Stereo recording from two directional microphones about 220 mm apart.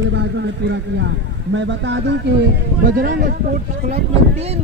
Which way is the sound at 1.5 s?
55° right (ahead or behind).